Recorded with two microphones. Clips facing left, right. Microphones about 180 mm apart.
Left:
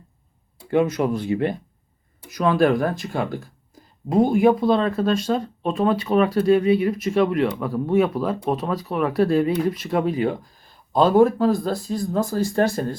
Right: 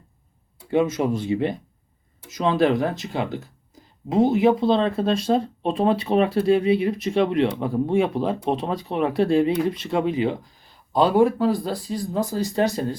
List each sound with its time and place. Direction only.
0.7 s speech: 55° left (ahead or behind)
2.3 s speech: 25° right (ahead or behind)
4.1 s speech: 50° left (ahead or behind)
4.5 s speech: 25° right (ahead or behind)
10.9 s speech: 45° left (ahead or behind)
12.3 s speech: 20° right (ahead or behind)